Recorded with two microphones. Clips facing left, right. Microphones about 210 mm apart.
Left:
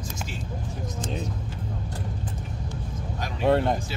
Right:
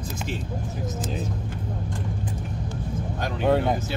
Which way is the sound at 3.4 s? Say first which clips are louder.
Even; centre (ahead or behind).